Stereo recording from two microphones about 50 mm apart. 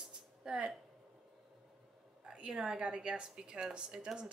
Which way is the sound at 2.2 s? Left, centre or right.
Centre.